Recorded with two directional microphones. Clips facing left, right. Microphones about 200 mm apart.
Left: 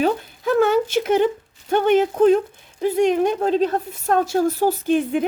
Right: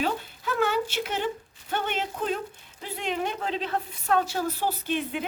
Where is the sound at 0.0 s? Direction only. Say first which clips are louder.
Left 8 dB; 50° left (ahead or behind).